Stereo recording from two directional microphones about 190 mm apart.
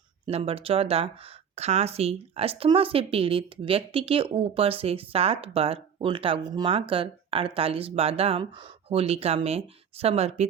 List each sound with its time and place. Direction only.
0.3 s speech: 30° right (ahead or behind)